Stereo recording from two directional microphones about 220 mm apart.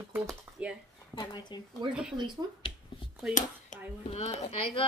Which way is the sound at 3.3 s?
35° left (ahead or behind).